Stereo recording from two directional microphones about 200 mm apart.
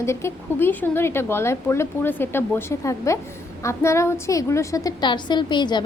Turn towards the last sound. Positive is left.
turn(degrees=20)  # may be behind; listen again after turning